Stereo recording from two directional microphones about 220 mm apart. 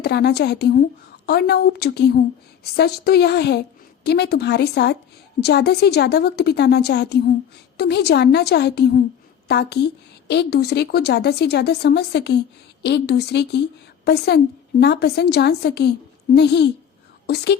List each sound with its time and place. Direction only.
0.0 s a woman's voice: 50° left (ahead or behind)